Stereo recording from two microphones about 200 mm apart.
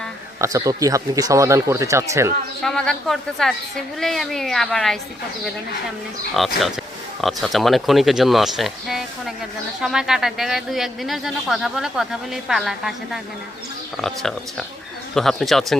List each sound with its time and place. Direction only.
0.3 s speech: 15° right (ahead or behind)
2.6 s speech: 5° left (ahead or behind)
6.4 s speech: centre (ahead or behind)